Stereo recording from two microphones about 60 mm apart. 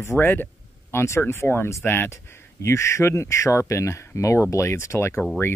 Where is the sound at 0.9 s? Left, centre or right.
Left.